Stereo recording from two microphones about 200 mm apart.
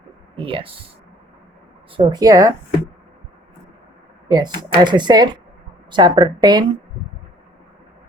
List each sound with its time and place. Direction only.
0.3 s speech: 25° right (ahead or behind)
2.0 s speech: 20° right (ahead or behind)
4.3 s speech: 20° right (ahead or behind)